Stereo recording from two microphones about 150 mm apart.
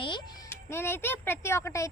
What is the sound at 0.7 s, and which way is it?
Speech, 15° left (ahead or behind).